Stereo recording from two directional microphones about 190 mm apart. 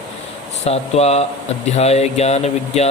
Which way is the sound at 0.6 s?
35° left (ahead or behind).